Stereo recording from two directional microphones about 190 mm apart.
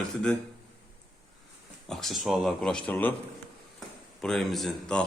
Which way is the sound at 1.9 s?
Centre (ahead or behind).